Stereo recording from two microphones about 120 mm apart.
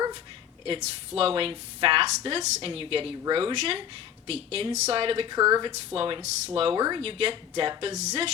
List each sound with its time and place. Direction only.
0.8 s a woman's voice: 55° right (ahead or behind)
5.4 s speech: 25° right (ahead or behind)
5.6 s a woman's voice: 50° right (ahead or behind)
6.7 s speech: 35° right (ahead or behind)
7.0 s a woman's voice: 50° right (ahead or behind)
7.9 s speech: 70° right (ahead or behind)